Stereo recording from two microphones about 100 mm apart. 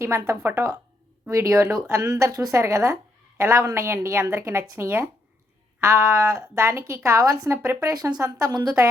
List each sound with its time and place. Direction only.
0.0 s a woman's voice: 25° right (ahead or behind)